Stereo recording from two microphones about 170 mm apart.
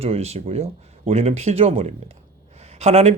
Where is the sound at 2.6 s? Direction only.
40° right (ahead or behind).